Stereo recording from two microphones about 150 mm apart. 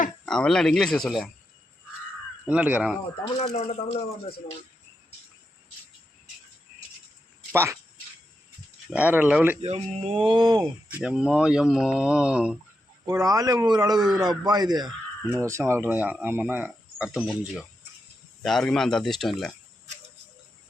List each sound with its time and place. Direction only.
0.3 s speech: 5° left (ahead or behind)
2.5 s speech: 10° right (ahead or behind)
3.2 s speech: 40° left (ahead or behind)
7.5 s speech: 15° right (ahead or behind)
8.9 s speech: 10° right (ahead or behind)
9.6 s speech: 45° right (ahead or behind)
10.2 s speech: 30° right (ahead or behind)
10.8 s speech: 10° right (ahead or behind)
13.1 s speech: 25° right (ahead or behind); by 19.5 s 5° left (ahead or behind)